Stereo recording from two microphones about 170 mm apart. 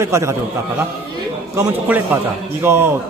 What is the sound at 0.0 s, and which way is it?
Speech, 15° right (ahead or behind).